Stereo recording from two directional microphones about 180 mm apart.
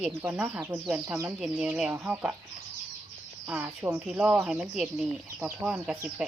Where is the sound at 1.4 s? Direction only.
5° right (ahead or behind).